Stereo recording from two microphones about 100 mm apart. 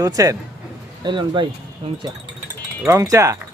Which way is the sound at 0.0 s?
35° right (ahead or behind).